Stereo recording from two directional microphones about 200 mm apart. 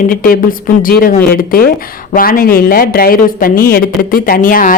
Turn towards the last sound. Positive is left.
turn(degrees=40)  # may be behind; listen again after turning